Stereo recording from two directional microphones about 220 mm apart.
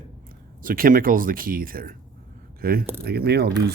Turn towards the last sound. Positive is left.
turn(degrees=-45)  # may be behind; listen again after turning